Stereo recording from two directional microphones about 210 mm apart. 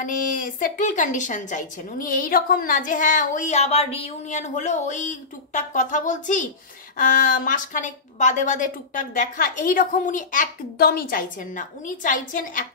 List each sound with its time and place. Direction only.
0.0 s a woman's voice: 40° left (ahead or behind)